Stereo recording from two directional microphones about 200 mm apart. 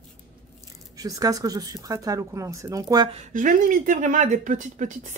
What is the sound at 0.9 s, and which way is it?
Speech, 20° right (ahead or behind).